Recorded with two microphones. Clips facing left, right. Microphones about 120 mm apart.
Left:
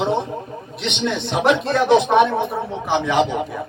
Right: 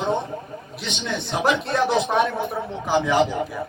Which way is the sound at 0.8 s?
70° left (ahead or behind).